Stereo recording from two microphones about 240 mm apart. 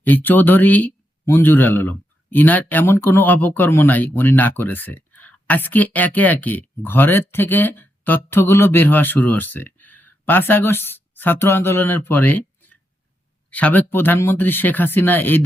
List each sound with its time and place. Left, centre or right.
0.0 s speech: centre